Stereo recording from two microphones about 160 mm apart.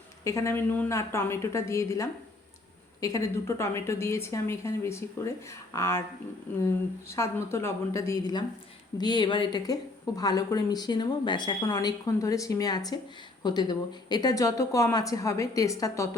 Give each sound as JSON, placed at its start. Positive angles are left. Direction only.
{"t": 0.3, "sound": "a woman's voice", "side_deg": 15}
{"t": 7.1, "sound": "a woman's voice", "side_deg": 15}